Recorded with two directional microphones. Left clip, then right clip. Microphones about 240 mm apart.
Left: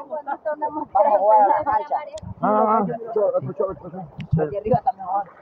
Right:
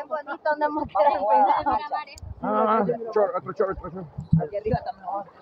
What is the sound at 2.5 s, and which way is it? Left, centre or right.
Speech, centre.